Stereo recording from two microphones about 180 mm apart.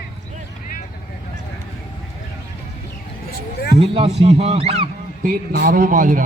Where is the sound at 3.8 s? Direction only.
35° right (ahead or behind).